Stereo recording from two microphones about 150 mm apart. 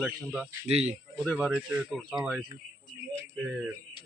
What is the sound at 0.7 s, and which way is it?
Speech, 45° right (ahead or behind).